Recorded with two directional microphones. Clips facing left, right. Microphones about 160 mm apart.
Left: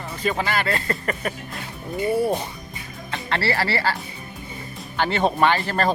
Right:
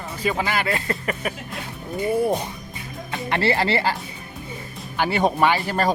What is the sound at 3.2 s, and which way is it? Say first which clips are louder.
Speech: right 3 dB; 20° right (ahead or behind).